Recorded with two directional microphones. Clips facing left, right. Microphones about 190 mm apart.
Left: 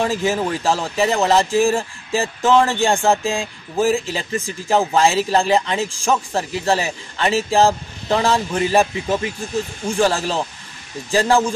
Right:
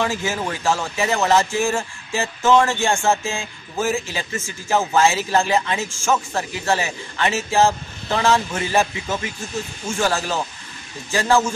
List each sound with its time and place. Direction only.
0.0 s speech: 35° left (ahead or behind)